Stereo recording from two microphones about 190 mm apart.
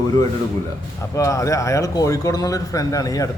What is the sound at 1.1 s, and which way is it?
Speech, 15° left (ahead or behind).